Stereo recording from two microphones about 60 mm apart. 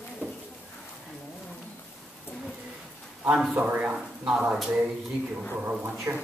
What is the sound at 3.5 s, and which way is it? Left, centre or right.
Speech, right.